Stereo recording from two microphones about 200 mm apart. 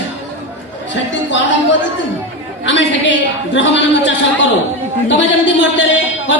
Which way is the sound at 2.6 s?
65° left (ahead or behind).